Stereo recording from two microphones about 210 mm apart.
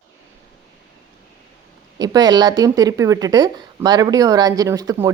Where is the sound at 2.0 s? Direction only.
20° right (ahead or behind).